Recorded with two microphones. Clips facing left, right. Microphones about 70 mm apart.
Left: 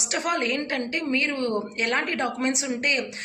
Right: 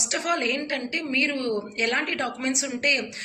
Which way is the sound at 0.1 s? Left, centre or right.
Left.